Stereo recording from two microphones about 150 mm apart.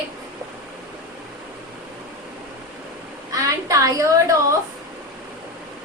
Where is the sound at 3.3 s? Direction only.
20° right (ahead or behind).